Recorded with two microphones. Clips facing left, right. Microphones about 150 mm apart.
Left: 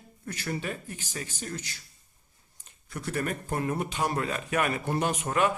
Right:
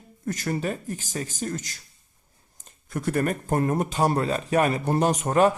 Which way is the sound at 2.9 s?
50° right (ahead or behind).